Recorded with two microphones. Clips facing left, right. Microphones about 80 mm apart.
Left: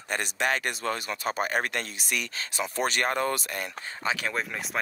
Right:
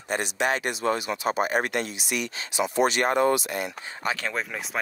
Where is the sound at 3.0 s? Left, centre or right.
Right.